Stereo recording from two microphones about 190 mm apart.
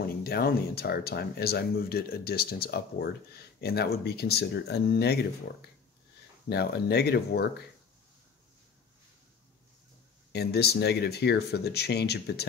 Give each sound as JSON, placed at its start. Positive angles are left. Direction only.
{"t": 0.2, "sound": "speech", "side_deg": 55}
{"t": 10.3, "sound": "speech", "side_deg": 60}